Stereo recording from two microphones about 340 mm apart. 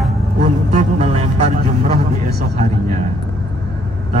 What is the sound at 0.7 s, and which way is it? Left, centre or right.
Music, centre.